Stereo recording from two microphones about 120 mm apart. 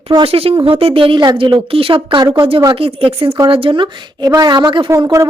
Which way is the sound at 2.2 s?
25° right (ahead or behind).